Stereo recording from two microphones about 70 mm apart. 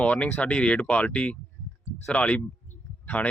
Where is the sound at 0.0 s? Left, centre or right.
Centre.